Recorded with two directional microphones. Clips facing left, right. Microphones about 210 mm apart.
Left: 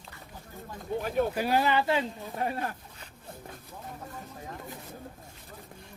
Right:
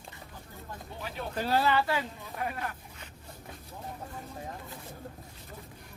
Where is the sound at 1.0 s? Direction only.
50° left (ahead or behind).